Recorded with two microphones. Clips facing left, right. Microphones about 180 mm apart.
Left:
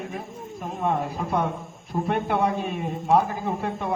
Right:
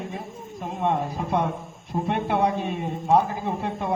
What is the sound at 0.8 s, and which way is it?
A man's voice, 25° right (ahead or behind).